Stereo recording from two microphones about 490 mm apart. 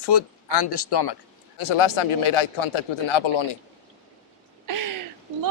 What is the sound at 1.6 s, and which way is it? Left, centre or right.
A man's voice, left.